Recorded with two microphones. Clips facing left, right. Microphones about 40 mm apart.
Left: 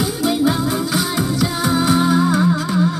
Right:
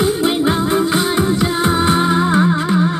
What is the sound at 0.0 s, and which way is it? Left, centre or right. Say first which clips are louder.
Music: right 2 dB; right.